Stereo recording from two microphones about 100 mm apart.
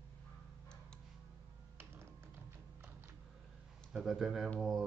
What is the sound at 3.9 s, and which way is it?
Speech, 5° right (ahead or behind).